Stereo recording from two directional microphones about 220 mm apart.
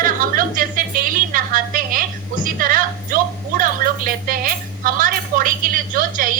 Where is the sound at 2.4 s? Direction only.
40° right (ahead or behind).